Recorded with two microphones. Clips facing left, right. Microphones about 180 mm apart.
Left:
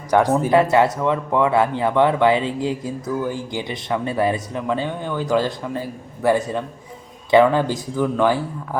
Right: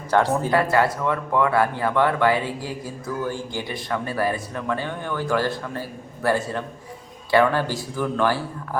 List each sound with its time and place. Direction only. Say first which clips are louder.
0.1 s speech: left 4 dB; 15° left (ahead or behind)